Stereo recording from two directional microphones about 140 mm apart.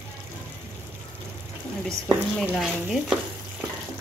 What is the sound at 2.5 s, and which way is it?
Stir, centre (ahead or behind).